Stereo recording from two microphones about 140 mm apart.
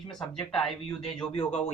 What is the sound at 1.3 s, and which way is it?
Speech, 45° left (ahead or behind).